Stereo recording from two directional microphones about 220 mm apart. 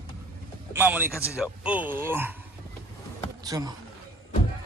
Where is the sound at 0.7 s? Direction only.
10° right (ahead or behind).